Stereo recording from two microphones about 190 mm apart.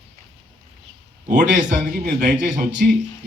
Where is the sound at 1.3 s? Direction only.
40° right (ahead or behind).